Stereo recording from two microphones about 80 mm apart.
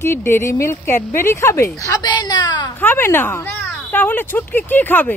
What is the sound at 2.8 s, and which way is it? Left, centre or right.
Speech, left.